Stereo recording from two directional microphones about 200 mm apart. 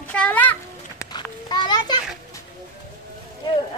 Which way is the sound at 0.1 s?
5° left (ahead or behind).